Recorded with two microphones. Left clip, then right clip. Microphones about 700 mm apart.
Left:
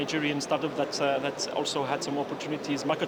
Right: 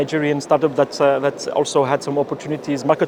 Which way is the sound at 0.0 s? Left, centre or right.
Right.